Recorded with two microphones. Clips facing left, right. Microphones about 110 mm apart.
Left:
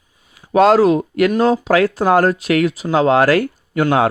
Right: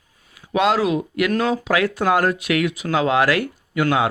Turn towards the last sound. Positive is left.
turn(degrees=40)  # may be behind; listen again after turning